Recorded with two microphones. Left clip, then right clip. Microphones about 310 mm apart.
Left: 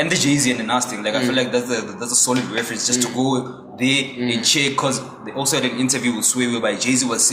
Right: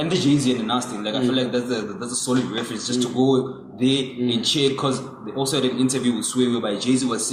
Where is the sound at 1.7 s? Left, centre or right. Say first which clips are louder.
Left 4 dB; centre.